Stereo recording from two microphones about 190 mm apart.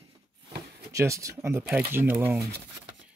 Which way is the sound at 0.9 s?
15° right (ahead or behind).